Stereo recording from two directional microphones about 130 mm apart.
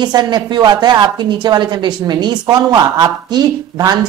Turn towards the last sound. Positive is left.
turn(degrees=-30)  # may be behind; listen again after turning